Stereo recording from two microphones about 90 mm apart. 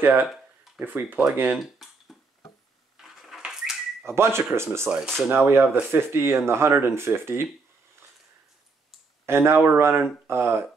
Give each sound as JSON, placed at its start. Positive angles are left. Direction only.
{"t": 0.0, "sound": "speech", "side_deg": -20}
{"t": 1.6, "sound": "a sound", "side_deg": 0}
{"t": 3.0, "sound": "dishes", "side_deg": 0}
{"t": 4.0, "sound": "speech", "side_deg": -30}
{"t": 4.9, "sound": "speech", "side_deg": -15}
{"t": 5.3, "sound": "speech", "side_deg": -25}
{"t": 9.2, "sound": "speech", "side_deg": -30}